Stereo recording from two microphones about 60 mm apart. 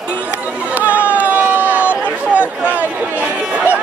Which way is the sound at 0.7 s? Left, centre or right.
Right.